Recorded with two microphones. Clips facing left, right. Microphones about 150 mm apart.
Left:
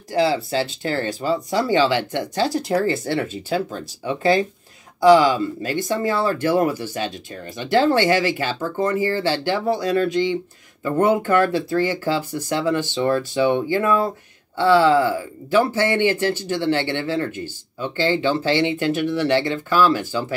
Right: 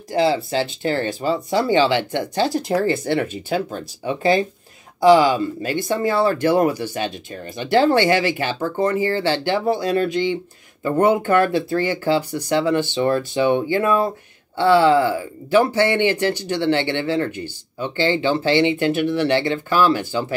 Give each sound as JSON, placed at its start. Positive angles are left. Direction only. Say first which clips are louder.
{"t": 0.2, "sound": "speech", "louder": "right 1 dB", "side_deg": -20}